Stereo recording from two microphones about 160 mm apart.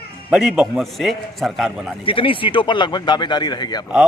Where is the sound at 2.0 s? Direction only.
35° left (ahead or behind).